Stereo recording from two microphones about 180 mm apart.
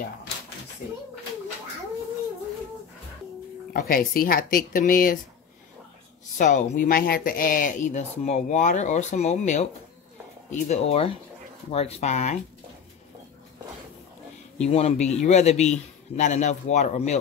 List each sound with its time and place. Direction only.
3.7 s speech: 55° left (ahead or behind)
6.3 s speech: 40° left (ahead or behind)
14.6 s speech: 35° left (ahead or behind)